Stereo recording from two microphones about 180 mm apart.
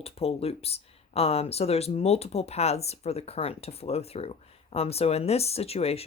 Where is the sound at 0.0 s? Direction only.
35° left (ahead or behind).